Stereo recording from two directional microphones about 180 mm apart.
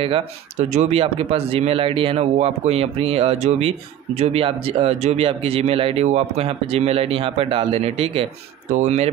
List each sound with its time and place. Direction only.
0.0 s speech: 35° right (ahead or behind)